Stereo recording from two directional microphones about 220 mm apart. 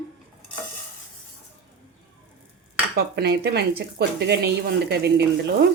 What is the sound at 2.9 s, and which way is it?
A woman's voice, 50° right (ahead or behind).